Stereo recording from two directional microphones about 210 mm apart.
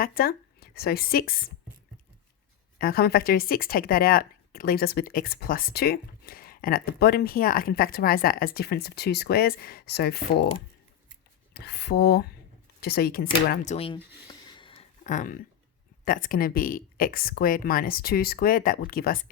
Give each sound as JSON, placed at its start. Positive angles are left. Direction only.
{"t": 0.0, "sound": "speech", "side_deg": 45}
{"t": 2.7, "sound": "speech", "side_deg": 45}
{"t": 11.5, "sound": "speech", "side_deg": 50}
{"t": 13.7, "sound": "speech", "side_deg": 25}
{"t": 14.3, "sound": "a sound", "side_deg": 25}
{"t": 16.0, "sound": "speech", "side_deg": 40}